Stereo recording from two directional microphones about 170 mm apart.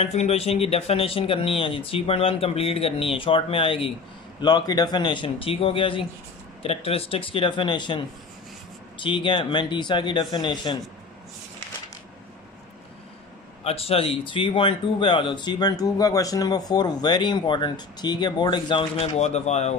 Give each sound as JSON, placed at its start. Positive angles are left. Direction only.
{"t": 0.0, "sound": "speech", "side_deg": 40}
{"t": 9.0, "sound": "speech", "side_deg": 30}
{"t": 13.7, "sound": "speech", "side_deg": 35}